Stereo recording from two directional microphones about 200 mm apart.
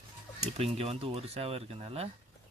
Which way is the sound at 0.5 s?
30° right (ahead or behind).